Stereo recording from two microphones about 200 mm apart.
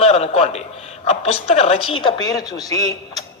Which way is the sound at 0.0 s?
30° left (ahead or behind).